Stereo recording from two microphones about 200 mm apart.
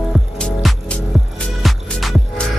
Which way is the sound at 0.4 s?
Centre (ahead or behind).